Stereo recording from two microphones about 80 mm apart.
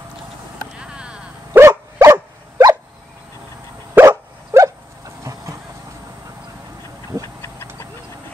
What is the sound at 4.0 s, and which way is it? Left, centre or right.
Dog, right.